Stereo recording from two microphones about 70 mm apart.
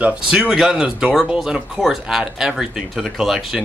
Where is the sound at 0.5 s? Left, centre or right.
Centre.